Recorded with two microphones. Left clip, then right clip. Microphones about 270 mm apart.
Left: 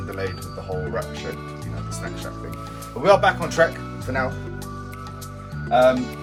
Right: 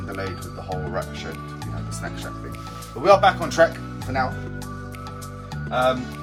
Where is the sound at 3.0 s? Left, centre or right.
Centre.